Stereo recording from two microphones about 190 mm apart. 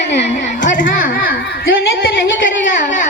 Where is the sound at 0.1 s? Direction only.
65° left (ahead or behind).